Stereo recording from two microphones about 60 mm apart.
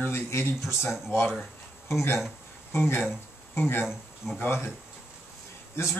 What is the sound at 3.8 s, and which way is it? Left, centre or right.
Speech, centre.